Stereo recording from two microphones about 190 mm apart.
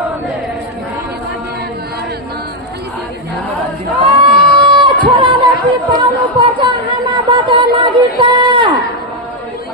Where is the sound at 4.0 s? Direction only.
25° right (ahead or behind).